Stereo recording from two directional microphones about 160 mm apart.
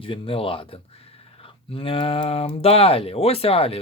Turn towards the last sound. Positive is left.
turn(degrees=35)  # may be behind; listen again after turning